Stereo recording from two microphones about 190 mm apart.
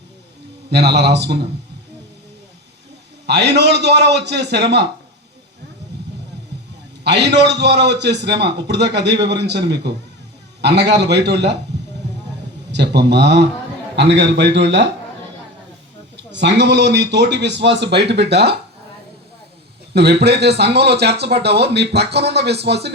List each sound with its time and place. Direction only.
0.7 s speech: 60° right (ahead or behind)
3.2 s speech: 60° right (ahead or behind)
7.0 s speech: 65° right (ahead or behind)
11.7 s a sound: 65° right (ahead or behind)
12.7 s speech: 65° right (ahead or behind)
16.1 s speech: 65° right (ahead or behind)
19.9 s speech: 60° right (ahead or behind)